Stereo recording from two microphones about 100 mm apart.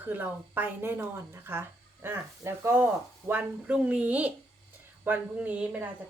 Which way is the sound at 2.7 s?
20° right (ahead or behind).